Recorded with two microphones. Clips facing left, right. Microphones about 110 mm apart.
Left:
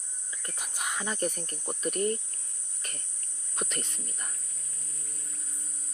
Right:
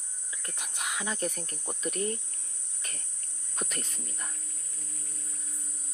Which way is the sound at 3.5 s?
Centre (ahead or behind).